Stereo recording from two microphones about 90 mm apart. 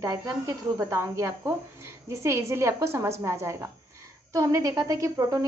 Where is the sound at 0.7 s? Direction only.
35° right (ahead or behind).